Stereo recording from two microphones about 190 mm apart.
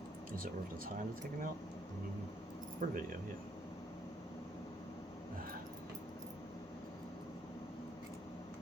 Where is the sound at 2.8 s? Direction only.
40° right (ahead or behind).